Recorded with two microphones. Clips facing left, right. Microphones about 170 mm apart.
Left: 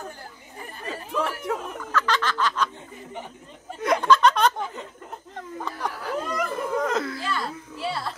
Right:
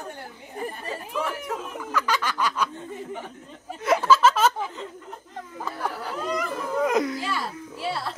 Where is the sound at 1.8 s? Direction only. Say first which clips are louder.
Right 2 dB; 10° right (ahead or behind).